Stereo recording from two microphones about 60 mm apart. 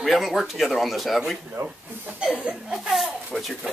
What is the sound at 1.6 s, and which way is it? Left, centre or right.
Speech, right.